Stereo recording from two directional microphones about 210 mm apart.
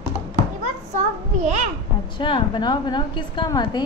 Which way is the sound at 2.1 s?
25° left (ahead or behind).